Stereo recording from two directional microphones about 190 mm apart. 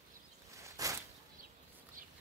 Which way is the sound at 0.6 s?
15° right (ahead or behind).